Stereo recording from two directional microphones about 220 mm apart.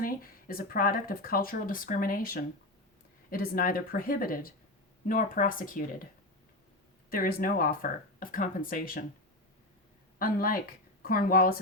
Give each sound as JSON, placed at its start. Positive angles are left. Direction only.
{"t": 0.0, "sound": "speech", "side_deg": 40}
{"t": 7.1, "sound": "speech", "side_deg": 40}
{"t": 10.2, "sound": "a woman's voice", "side_deg": 40}